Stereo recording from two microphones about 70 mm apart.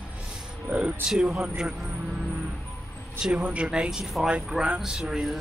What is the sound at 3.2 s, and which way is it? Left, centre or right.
Speech, centre.